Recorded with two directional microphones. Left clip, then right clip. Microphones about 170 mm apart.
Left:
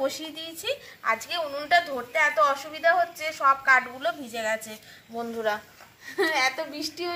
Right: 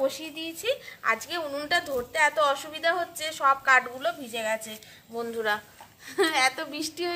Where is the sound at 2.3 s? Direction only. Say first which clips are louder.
Left 2 dB; 65° right (ahead or behind).